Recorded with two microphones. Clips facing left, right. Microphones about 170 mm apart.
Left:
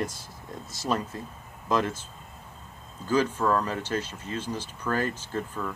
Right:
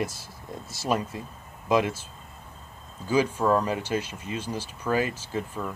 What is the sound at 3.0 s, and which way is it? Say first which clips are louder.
Speech: right 1 dB; 10° right (ahead or behind).